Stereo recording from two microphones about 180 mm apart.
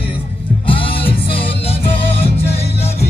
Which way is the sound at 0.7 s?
30° left (ahead or behind).